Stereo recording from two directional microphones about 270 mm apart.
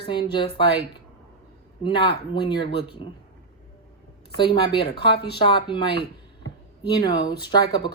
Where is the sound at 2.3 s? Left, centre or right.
Centre.